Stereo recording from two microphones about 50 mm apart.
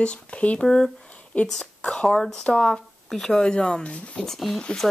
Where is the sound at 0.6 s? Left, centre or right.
Centre.